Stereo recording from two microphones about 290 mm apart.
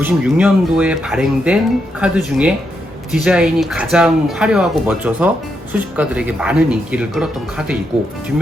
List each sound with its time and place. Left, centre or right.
0.0 s speech: centre